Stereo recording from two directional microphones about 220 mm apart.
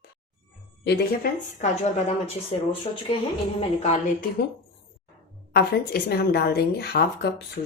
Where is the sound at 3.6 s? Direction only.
30° left (ahead or behind).